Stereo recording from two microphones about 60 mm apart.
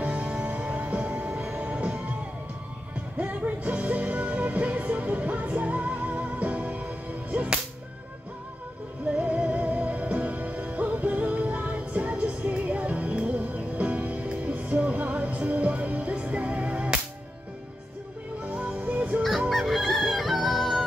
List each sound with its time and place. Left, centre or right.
0.0 s music: right
3.2 s music: right
9.1 s music: centre
18.4 s music: right
19.5 s chicken: centre